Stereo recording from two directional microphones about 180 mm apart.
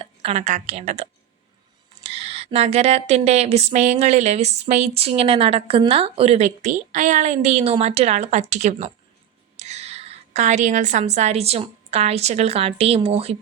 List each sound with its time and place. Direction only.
0.0 s a woman's voice: 30° right (ahead or behind)
2.0 s a woman's voice: 35° right (ahead or behind)